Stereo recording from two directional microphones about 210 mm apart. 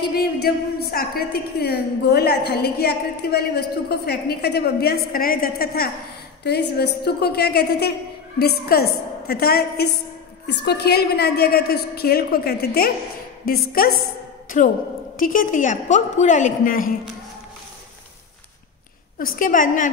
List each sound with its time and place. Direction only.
0.1 s a woman's voice: 50° left (ahead or behind)
15.1 s a woman's voice: 40° left (ahead or behind)
19.1 s a woman's voice: 40° left (ahead or behind)